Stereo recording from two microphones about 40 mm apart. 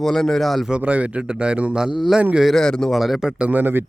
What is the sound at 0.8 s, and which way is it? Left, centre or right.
Speech, right.